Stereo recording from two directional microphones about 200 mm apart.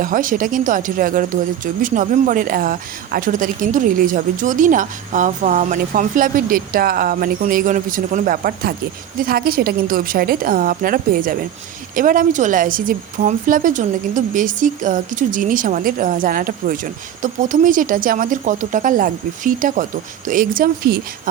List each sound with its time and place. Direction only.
0.0 s a woman's voice: 40° right (ahead or behind)